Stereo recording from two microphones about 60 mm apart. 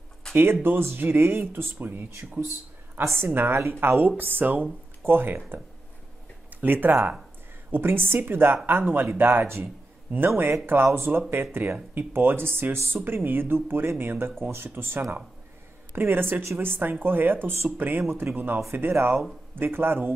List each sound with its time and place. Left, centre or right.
0.3 s a woman's voice: right
3.6 s a woman's voice: right
4.2 s speech: right
6.6 s speech: right